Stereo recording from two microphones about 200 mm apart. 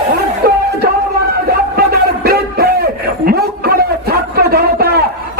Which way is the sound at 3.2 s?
50° right (ahead or behind).